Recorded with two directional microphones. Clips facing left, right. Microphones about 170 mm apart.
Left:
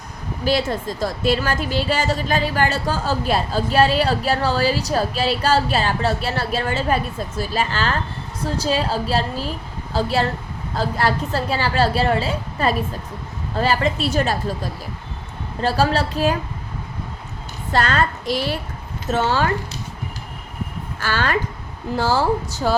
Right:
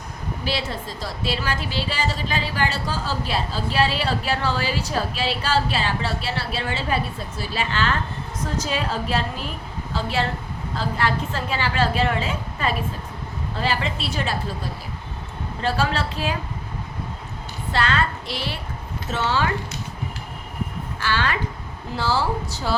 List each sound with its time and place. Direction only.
0.4 s a woman's voice: 45° left (ahead or behind)
15.6 s a woman's voice: 40° left (ahead or behind)
17.7 s a woman's voice: 45° left (ahead or behind)
21.0 s a woman's voice: 45° left (ahead or behind)